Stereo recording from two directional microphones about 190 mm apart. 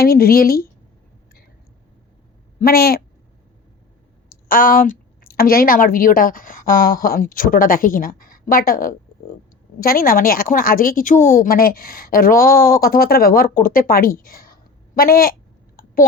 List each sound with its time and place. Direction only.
0.0 s a woman's voice: 50° left (ahead or behind)
2.6 s a woman's voice: 50° left (ahead or behind)
4.4 s a woman's voice: 45° left (ahead or behind)
13.6 s a sound: 50° left (ahead or behind)